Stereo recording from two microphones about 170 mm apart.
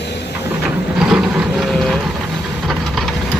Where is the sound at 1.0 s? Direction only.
5° right (ahead or behind).